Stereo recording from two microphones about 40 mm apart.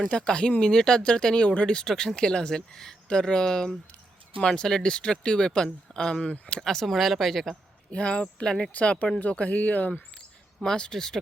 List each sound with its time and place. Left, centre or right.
0.1 s speech: left
1.8 s speech: centre
6.6 s speech: centre
7.9 s speech: left
10.6 s speech: centre